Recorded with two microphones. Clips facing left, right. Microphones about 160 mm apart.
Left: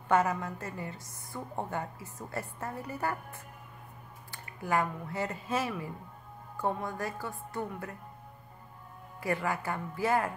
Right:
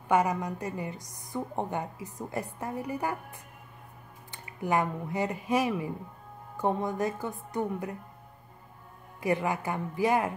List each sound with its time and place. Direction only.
0.1 s a woman's voice: 15° right (ahead or behind)
9.2 s a woman's voice: 20° right (ahead or behind)